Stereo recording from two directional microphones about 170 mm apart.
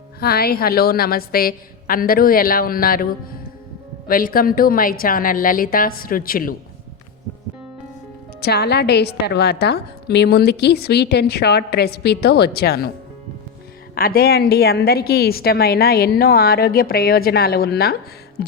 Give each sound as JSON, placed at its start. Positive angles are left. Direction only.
{"t": 0.2, "sound": "a woman's voice", "side_deg": 65}
{"t": 8.4, "sound": "a woman's voice", "side_deg": 70}
{"t": 13.9, "sound": "a woman's voice", "side_deg": 60}